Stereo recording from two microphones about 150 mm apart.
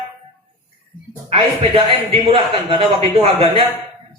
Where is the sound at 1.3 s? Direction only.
35° right (ahead or behind).